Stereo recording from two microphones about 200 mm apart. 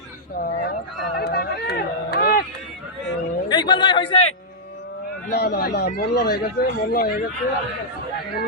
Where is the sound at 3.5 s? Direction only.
20° left (ahead or behind).